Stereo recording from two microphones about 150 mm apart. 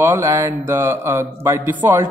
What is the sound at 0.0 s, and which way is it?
Speech, 15° right (ahead or behind).